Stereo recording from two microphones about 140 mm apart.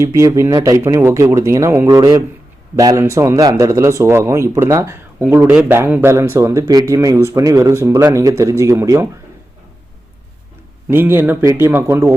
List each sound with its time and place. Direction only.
0.0 s speech: 25° right (ahead or behind)
10.8 s speech: 15° right (ahead or behind)